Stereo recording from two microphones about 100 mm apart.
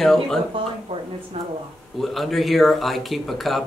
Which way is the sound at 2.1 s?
Centre (ahead or behind).